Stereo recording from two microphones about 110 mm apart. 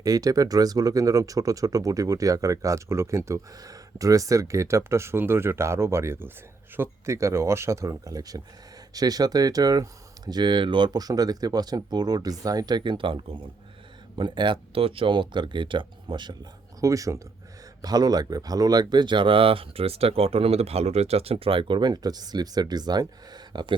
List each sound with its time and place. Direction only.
0.0 s speech: 35° right (ahead or behind)